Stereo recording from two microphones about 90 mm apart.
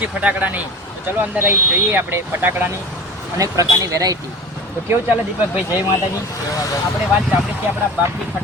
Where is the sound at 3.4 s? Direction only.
40° right (ahead or behind).